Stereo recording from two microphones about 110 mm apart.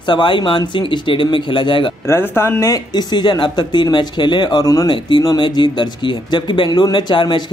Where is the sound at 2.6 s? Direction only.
35° left (ahead or behind).